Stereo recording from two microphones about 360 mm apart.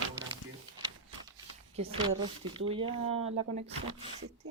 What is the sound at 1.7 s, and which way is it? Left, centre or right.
Speech, centre.